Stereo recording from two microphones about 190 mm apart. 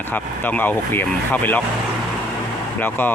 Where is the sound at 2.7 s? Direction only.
10° left (ahead or behind).